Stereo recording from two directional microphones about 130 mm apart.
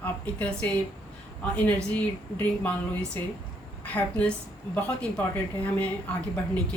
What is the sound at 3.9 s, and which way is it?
Speech, 10° left (ahead or behind).